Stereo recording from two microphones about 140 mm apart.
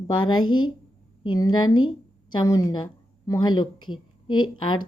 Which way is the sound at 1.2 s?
30° left (ahead or behind).